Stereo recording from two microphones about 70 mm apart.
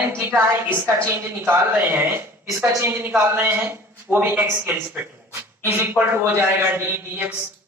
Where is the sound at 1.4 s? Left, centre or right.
Right.